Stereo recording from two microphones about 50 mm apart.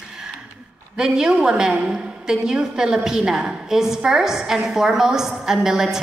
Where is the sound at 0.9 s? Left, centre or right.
Centre.